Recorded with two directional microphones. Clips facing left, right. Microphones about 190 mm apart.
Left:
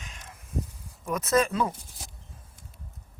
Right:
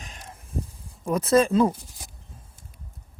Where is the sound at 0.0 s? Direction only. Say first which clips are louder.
Right 4 dB; 35° right (ahead or behind).